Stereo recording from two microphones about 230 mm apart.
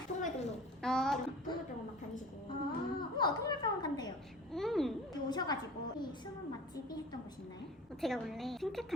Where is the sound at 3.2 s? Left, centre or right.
Centre.